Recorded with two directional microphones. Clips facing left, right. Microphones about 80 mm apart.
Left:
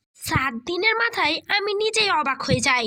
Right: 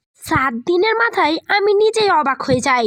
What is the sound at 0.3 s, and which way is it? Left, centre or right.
A child's voice, right.